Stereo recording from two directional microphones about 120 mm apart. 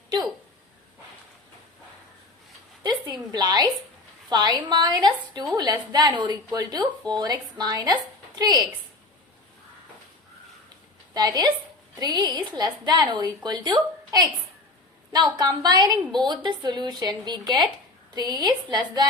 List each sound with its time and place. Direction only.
2.8 s a woman's voice: 35° right (ahead or behind)
11.1 s a woman's voice: 35° right (ahead or behind)